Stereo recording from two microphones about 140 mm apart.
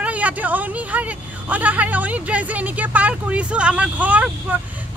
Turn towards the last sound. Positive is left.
turn(degrees=-10)  # may be behind; listen again after turning